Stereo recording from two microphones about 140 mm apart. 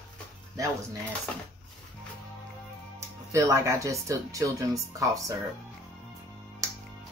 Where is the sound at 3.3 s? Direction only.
20° right (ahead or behind).